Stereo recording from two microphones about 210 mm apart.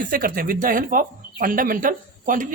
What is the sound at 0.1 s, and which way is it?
Speech, 40° right (ahead or behind).